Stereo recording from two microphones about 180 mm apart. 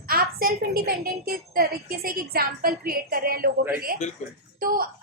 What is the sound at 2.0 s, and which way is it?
A woman's voice, 55° right (ahead or behind).